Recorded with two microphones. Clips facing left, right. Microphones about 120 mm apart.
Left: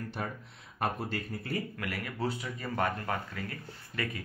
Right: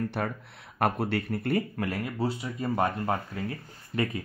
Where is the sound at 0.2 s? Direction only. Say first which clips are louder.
Right 6 dB; 65° right (ahead or behind).